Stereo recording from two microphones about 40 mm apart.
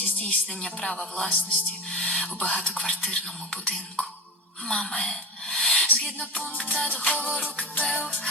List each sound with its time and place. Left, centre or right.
0.0 s music: left
0.6 s speech: centre
4.7 s speech: left
5.5 s a sound: left
6.0 s speech: left
6.9 s music: left